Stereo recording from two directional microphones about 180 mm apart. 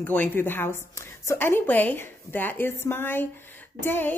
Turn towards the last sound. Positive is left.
turn(degrees=10)  # may be behind; listen again after turning